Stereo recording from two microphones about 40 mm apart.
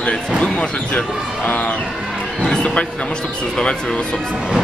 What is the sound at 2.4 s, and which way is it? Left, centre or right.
Speech, left.